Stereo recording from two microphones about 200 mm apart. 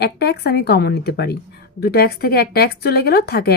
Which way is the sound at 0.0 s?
55° left (ahead or behind).